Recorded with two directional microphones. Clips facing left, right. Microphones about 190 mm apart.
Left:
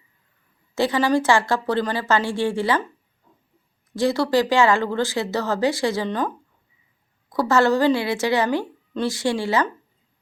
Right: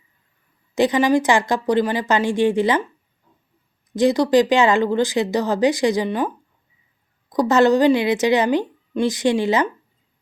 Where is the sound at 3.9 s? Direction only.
20° right (ahead or behind).